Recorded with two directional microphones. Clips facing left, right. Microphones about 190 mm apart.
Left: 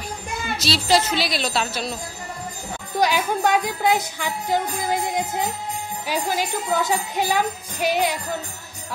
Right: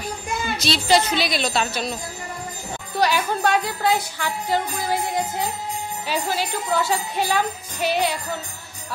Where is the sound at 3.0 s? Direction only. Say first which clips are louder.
Even; 15° left (ahead or behind).